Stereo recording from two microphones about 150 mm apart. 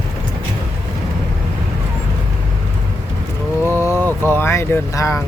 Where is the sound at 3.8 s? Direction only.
15° left (ahead or behind).